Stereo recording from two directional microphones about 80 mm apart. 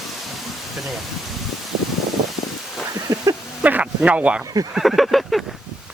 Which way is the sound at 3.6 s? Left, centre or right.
Centre.